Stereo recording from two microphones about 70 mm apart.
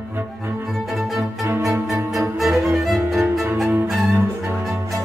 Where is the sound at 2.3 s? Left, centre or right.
Centre.